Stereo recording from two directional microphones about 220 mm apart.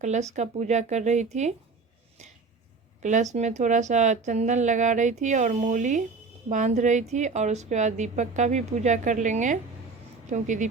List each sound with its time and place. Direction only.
0.0 s a woman's voice: 30° right (ahead or behind)
3.0 s a woman's voice: 35° right (ahead or behind)